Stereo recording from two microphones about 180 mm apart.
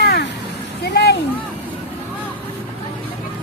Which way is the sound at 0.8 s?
65° left (ahead or behind).